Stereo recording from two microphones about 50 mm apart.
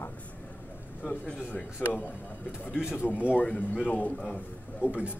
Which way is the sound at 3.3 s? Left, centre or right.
Left.